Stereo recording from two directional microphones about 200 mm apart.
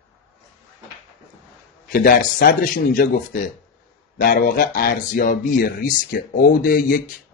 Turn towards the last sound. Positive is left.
turn(degrees=45)  # may be behind; listen again after turning